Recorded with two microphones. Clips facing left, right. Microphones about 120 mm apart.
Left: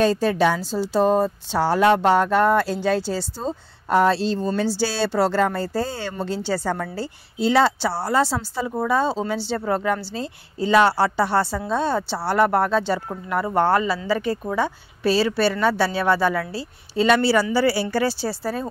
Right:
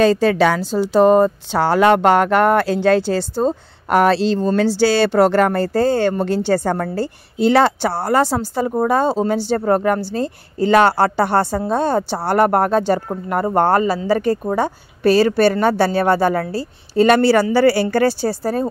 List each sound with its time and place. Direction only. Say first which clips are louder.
0.0 s a woman's voice: right 5 dB; 85° right
4.6 s speech: right 7 dB; 65° right (ahead or behind); by 18.7 s 45° right (ahead or behind)